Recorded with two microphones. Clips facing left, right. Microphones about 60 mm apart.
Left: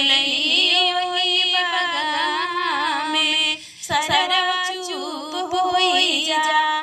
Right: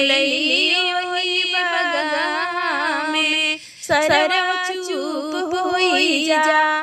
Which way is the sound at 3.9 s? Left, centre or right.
Right.